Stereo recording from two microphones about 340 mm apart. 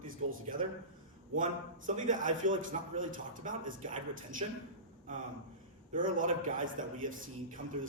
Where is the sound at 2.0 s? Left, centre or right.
Right.